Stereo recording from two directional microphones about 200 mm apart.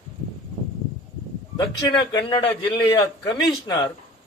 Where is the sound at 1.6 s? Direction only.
20° left (ahead or behind).